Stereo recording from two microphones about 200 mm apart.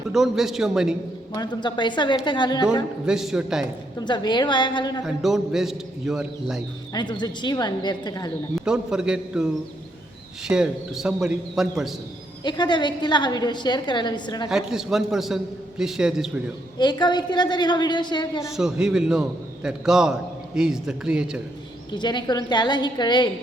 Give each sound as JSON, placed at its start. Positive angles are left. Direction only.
{"t": 0.1, "sound": "a man's voice", "side_deg": 0}
{"t": 1.3, "sound": "a woman's voice", "side_deg": 20}
{"t": 3.1, "sound": "a man's voice", "side_deg": -5}
{"t": 3.9, "sound": "a woman's voice", "side_deg": 20}
{"t": 5.0, "sound": "a man's voice", "side_deg": 0}
{"t": 6.9, "sound": "a woman's voice", "side_deg": 20}
{"t": 8.5, "sound": "a man's voice", "side_deg": -5}
{"t": 12.4, "sound": "a woman's voice", "side_deg": 20}
{"t": 14.5, "sound": "a man's voice", "side_deg": 0}
{"t": 16.7, "sound": "a woman's voice", "side_deg": 20}
{"t": 18.4, "sound": "a man's voice", "side_deg": -5}
{"t": 21.9, "sound": "a woman's voice", "side_deg": 20}